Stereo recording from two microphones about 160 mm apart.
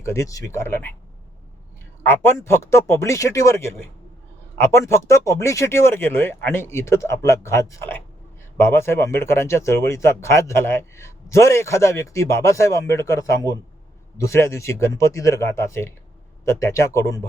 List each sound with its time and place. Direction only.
0.0 s speech: 20° left (ahead or behind)
2.0 s speech: 15° left (ahead or behind)